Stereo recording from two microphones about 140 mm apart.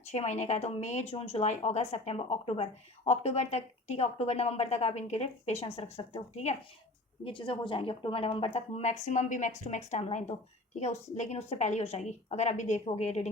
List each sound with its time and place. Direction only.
0.1 s speech: 50° left (ahead or behind)
7.3 s speech: 40° left (ahead or behind); by 13.3 s 55° left (ahead or behind)